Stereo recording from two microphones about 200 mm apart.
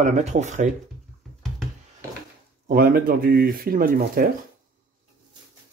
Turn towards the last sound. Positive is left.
turn(degrees=-45)  # may be behind; listen again after turning